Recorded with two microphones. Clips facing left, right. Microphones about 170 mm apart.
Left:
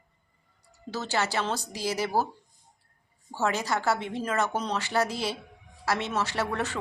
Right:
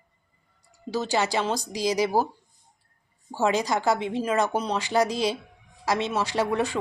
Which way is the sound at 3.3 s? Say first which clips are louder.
Right 4 dB; 15° right (ahead or behind).